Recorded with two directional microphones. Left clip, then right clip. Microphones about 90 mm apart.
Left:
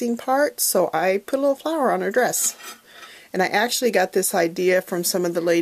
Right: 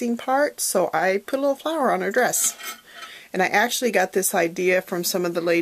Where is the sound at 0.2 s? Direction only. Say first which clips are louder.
Left 1 dB; 45° left (ahead or behind).